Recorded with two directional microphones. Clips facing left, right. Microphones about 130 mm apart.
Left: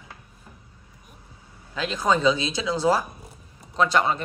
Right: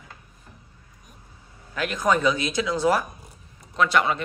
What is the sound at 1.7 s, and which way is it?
Speech, 25° left (ahead or behind).